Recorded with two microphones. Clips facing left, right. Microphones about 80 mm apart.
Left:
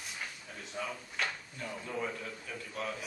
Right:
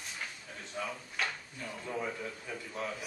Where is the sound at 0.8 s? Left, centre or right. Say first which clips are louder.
Right 1 dB; centre.